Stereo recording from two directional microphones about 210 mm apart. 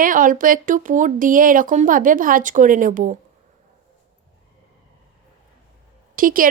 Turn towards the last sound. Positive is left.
turn(degrees=-40)  # may be behind; listen again after turning